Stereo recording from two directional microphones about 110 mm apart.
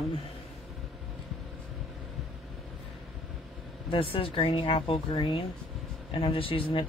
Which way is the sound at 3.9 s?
55° left (ahead or behind).